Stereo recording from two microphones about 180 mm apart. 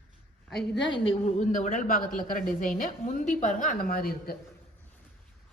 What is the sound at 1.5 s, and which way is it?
A woman's voice, 45° left (ahead or behind).